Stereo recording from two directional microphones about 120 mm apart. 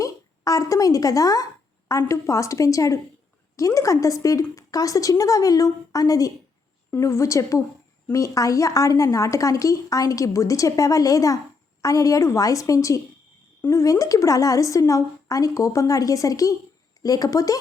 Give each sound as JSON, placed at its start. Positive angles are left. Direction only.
{"t": 0.0, "sound": "a woman's voice", "side_deg": 30}